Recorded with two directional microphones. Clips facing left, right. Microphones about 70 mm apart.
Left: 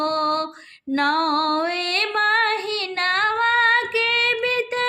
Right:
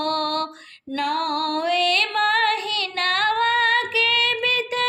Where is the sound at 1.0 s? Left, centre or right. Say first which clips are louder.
Left 3 dB; left.